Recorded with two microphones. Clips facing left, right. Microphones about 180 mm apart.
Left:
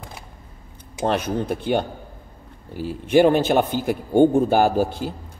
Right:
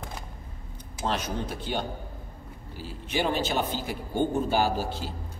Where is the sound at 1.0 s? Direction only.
55° left (ahead or behind).